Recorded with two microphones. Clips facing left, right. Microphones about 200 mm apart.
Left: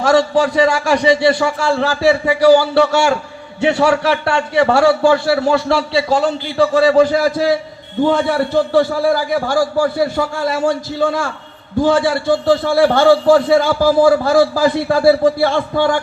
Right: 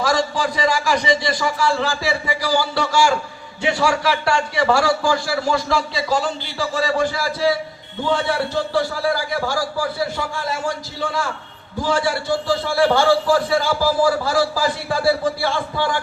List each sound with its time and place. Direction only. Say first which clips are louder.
0.0 s a man's voice: left 7 dB; 60° left (ahead or behind)
6.6 s a man's voice: left 10 dB; 55° left (ahead or behind)